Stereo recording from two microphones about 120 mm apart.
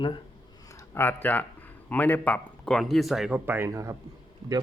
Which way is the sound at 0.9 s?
20° left (ahead or behind).